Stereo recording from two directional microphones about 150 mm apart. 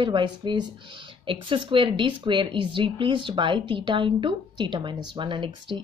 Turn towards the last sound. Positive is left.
turn(degrees=-30)  # may be behind; listen again after turning